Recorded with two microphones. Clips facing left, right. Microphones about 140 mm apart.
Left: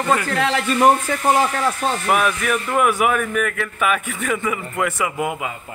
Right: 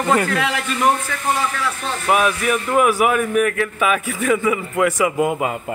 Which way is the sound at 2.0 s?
10° right (ahead or behind).